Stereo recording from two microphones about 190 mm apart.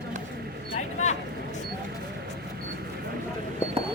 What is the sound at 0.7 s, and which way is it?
Vehicle, 40° left (ahead or behind).